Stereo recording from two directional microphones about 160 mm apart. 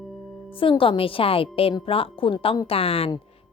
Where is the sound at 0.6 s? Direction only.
35° left (ahead or behind).